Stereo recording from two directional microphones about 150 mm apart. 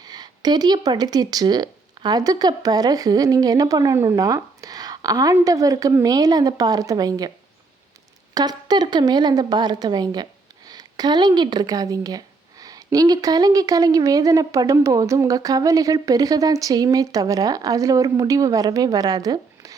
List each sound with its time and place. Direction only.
0.0 s speech: 25° right (ahead or behind)